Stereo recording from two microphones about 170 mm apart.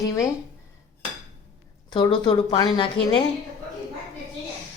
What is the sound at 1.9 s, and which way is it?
A woman's voice, 25° left (ahead or behind).